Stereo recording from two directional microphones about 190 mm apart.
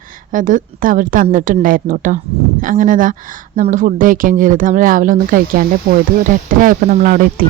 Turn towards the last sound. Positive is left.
turn(degrees=-45)  # may be behind; listen again after turning